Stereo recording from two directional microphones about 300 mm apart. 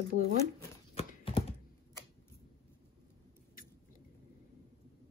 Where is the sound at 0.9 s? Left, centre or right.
Centre.